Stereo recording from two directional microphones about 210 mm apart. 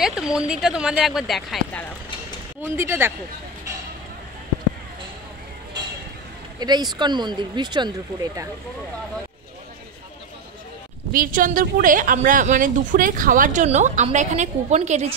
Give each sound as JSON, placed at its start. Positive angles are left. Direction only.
{"t": 0.0, "sound": "speech", "side_deg": -5}
{"t": 2.6, "sound": "speech", "side_deg": -10}
{"t": 6.6, "sound": "speech", "side_deg": -20}
{"t": 11.1, "sound": "a woman's voice", "side_deg": -40}